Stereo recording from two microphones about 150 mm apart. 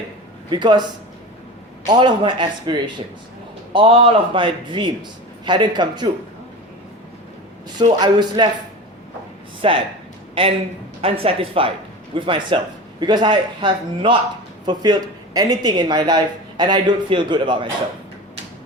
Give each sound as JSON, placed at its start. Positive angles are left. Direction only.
{"t": 0.5, "sound": "a man's voice", "side_deg": -30}
{"t": 1.9, "sound": "a man's voice", "side_deg": -30}
{"t": 8.0, "sound": "a man's voice", "side_deg": -30}
{"t": 9.6, "sound": "a man's voice", "side_deg": -35}